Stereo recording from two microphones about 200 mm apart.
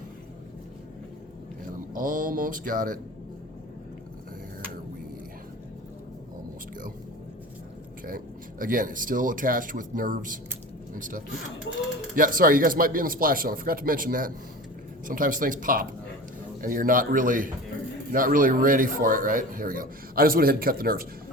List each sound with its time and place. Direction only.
1.6 s speech: 45° right (ahead or behind)
8.0 s speech: 45° right (ahead or behind)